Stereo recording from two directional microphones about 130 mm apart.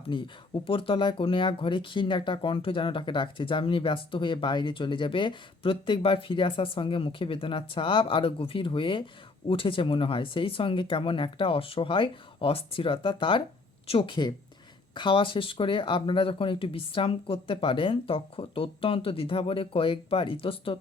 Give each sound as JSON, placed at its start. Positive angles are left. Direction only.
{"t": 0.1, "sound": "speech", "side_deg": 40}